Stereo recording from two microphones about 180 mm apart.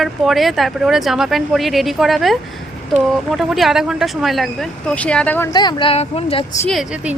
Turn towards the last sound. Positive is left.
turn(degrees=-5)  # may be behind; listen again after turning